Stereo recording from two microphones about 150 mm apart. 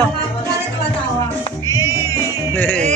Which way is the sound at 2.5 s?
10° left (ahead or behind).